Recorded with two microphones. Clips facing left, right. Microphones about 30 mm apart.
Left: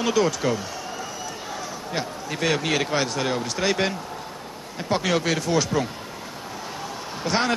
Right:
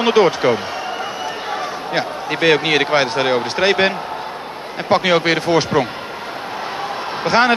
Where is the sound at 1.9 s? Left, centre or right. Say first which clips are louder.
Right 8 dB; right.